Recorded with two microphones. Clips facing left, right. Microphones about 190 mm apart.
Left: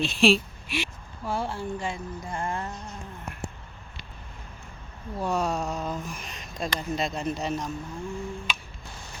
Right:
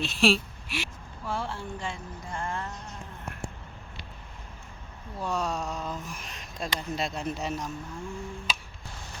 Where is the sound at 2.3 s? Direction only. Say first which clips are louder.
Left 2 dB; 20° left (ahead or behind).